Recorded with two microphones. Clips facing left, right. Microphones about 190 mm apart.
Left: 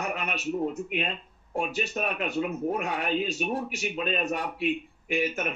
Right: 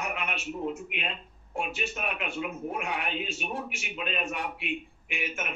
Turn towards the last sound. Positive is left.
turn(degrees=40)  # may be behind; listen again after turning